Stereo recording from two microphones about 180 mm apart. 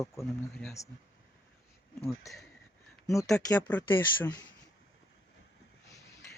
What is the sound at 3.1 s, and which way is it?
Speech, 20° left (ahead or behind).